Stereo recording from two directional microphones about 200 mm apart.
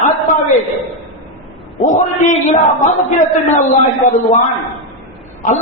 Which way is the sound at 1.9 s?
40° left (ahead or behind).